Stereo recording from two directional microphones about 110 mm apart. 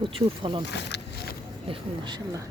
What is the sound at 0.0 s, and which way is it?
Speech, 50° right (ahead or behind).